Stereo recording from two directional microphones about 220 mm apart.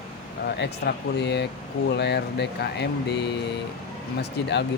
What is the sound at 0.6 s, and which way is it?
Speech, 50° left (ahead or behind).